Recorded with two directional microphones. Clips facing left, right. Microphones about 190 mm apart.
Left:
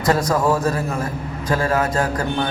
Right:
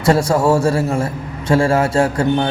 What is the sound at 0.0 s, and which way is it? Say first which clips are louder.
A man's voice: right 4 dB; 30° right (ahead or behind).